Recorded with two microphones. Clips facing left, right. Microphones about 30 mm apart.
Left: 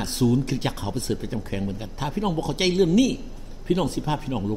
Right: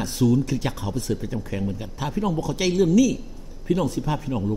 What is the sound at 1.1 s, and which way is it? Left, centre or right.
Speech, left.